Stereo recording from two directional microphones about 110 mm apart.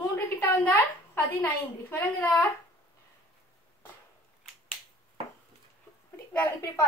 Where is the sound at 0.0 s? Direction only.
20° left (ahead or behind).